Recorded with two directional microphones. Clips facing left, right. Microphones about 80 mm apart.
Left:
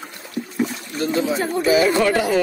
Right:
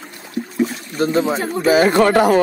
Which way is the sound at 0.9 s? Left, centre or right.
Right.